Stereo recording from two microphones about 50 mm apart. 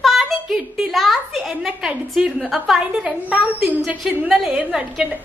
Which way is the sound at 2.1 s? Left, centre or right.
Centre.